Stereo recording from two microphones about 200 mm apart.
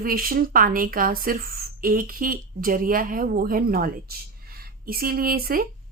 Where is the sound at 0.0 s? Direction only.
45° right (ahead or behind).